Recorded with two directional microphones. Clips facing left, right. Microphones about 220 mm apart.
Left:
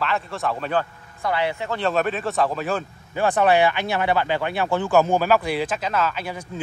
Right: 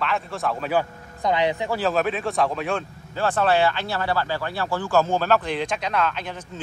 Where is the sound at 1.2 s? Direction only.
20° right (ahead or behind).